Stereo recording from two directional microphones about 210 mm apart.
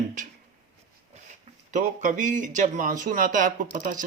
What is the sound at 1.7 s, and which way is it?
Speech, 35° right (ahead or behind).